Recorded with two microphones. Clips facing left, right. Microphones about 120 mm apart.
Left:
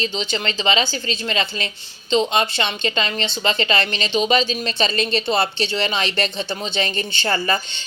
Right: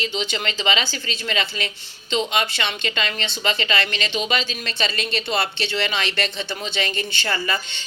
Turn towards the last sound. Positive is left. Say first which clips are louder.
# left 4 dB
turn(degrees=40)  # may be behind; listen again after turning